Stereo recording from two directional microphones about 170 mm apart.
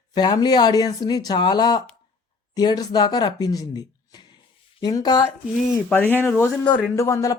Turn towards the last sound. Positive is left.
turn(degrees=20)  # may be behind; listen again after turning